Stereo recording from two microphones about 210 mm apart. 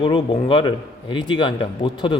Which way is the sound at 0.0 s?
25° left (ahead or behind).